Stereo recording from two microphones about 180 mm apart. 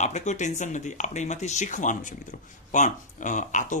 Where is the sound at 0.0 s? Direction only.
40° left (ahead or behind).